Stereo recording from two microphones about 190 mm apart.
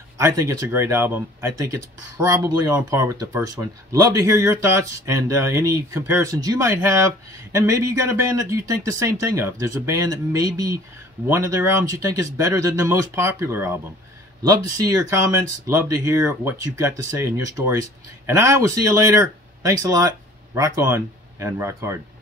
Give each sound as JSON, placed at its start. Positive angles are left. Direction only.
{"t": 0.2, "sound": "speech", "side_deg": -15}